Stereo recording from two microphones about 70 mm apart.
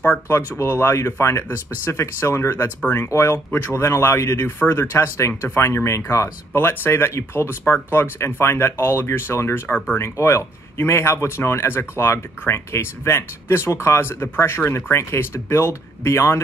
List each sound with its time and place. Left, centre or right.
0.6 s speech: left
3.1 s speech: left
5.9 s speech: left
6.5 s speech: left